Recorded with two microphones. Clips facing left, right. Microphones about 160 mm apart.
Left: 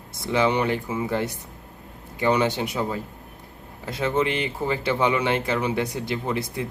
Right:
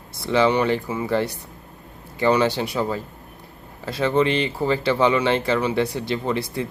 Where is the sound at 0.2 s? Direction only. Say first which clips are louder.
Right 3 dB; 20° left (ahead or behind).